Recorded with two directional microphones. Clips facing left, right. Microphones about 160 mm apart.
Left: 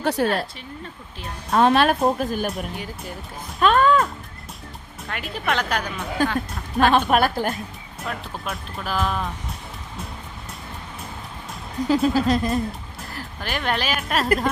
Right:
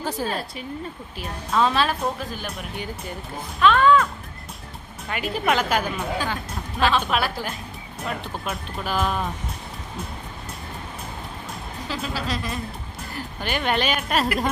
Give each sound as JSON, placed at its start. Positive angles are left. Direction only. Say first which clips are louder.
{"t": 0.0, "sound": "speech", "louder": "left 6 dB", "side_deg": 70}
{"t": 1.5, "sound": "speech", "louder": "left 4 dB", "side_deg": 55}
{"t": 2.0, "sound": "speech", "louder": "left 7 dB", "side_deg": 50}
{"t": 2.7, "sound": "speech", "louder": "right 1 dB", "side_deg": 0}
{"t": 3.6, "sound": "speech", "louder": "even", "side_deg": 45}
{"t": 5.0, "sound": "speech", "louder": "right 3 dB", "side_deg": 0}
{"t": 6.7, "sound": "speech", "louder": "left 4 dB", "side_deg": 50}
{"t": 8.0, "sound": "speech", "louder": "right 1 dB", "side_deg": 0}
{"t": 12.0, "sound": "speech", "louder": "left 9 dB", "side_deg": 45}
{"t": 13.0, "sound": "speech", "louder": "right 2 dB", "side_deg": 0}